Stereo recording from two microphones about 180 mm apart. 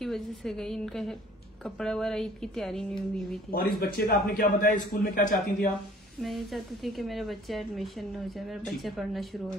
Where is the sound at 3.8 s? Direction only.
55° left (ahead or behind).